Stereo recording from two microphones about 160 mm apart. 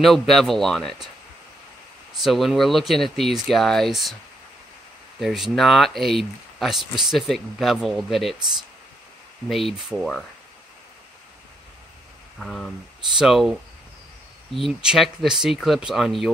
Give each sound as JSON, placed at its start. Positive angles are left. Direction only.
{"t": 0.0, "sound": "speech", "side_deg": 0}
{"t": 2.2, "sound": "speech", "side_deg": 0}
{"t": 5.2, "sound": "speech", "side_deg": 0}
{"t": 9.5, "sound": "speech", "side_deg": 0}
{"t": 12.4, "sound": "speech", "side_deg": 0}